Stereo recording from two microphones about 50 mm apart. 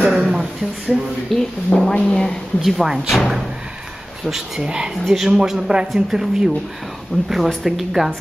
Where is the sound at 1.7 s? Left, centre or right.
Left.